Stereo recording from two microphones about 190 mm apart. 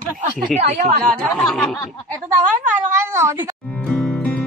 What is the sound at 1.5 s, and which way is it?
Speech, centre (ahead or behind).